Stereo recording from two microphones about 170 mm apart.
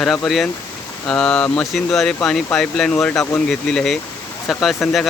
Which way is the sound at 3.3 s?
5° left (ahead or behind).